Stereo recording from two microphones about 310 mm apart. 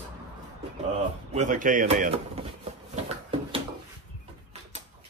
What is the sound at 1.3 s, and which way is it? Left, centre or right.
Speech, right.